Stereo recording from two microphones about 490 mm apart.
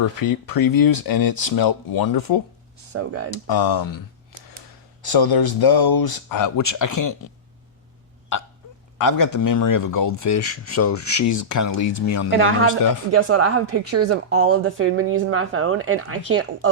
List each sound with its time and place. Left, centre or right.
0.2 s speech: left
2.9 s a woman's voice: right
3.2 s speech: left
9.0 s speech: left
12.3 s a woman's voice: right